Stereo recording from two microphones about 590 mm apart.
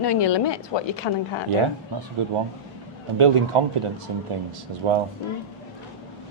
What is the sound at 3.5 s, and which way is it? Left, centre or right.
Speech, right.